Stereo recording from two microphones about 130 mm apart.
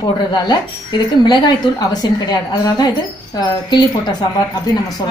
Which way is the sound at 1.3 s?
35° left (ahead or behind).